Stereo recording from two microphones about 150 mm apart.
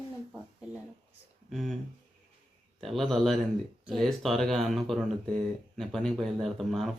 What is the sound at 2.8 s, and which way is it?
Speech, centre (ahead or behind).